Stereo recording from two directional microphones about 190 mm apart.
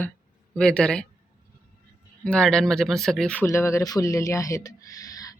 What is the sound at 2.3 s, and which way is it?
Speech, 5° left (ahead or behind).